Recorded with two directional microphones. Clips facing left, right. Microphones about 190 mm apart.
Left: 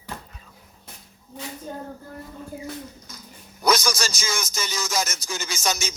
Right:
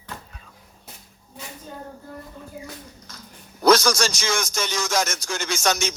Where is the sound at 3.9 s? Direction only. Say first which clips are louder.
Right 5 dB; 5° left (ahead or behind).